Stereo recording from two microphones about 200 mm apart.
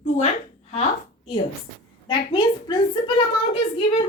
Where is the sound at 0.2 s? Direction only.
35° left (ahead or behind).